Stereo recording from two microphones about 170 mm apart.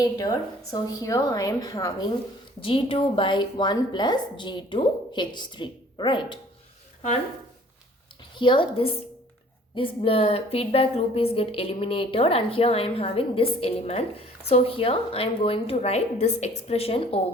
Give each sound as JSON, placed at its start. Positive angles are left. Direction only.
{"t": 0.0, "sound": "a woman's voice", "side_deg": 20}
{"t": 2.6, "sound": "a woman's voice", "side_deg": 35}
{"t": 8.4, "sound": "a woman's voice", "side_deg": 30}